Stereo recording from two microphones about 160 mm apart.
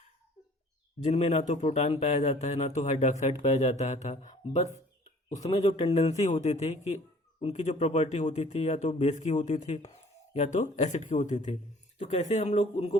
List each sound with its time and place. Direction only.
1.0 s speech: 45° left (ahead or behind)